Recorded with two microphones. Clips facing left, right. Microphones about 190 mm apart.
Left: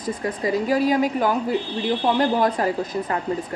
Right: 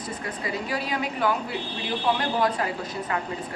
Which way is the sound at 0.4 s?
40° left (ahead or behind).